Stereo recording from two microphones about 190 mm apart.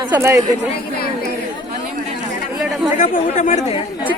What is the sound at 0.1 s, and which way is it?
Speech, 15° right (ahead or behind).